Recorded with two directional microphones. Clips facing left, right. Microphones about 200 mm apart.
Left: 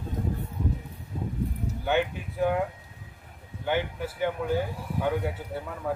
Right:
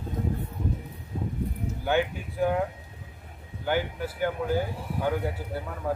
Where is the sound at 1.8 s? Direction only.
Centre (ahead or behind).